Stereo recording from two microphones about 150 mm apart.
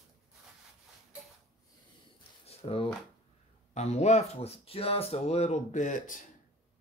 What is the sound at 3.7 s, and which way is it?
Speech, 50° left (ahead or behind).